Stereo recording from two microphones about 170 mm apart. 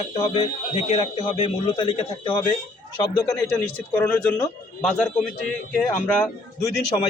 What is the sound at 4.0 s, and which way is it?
Speech, 10° left (ahead or behind).